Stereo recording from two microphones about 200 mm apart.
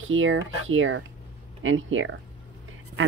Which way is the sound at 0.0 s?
80° right.